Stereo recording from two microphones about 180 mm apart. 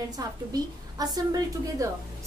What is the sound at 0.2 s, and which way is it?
A woman's voice, 20° right (ahead or behind).